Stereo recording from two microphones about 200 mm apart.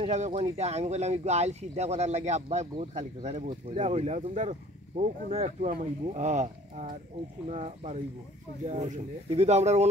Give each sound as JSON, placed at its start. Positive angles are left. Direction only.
{"t": 0.0, "sound": "speech", "side_deg": -30}